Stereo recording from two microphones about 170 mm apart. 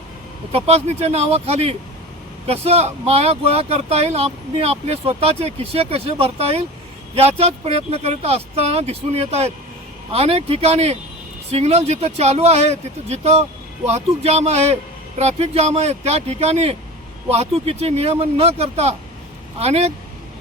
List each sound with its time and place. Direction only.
0.5 s speech: 40° right (ahead or behind)